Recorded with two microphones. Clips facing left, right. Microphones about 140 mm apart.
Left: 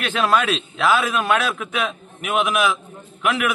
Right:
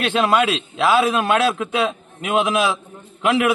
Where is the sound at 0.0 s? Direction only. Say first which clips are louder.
Right 2 dB; 20° right (ahead or behind).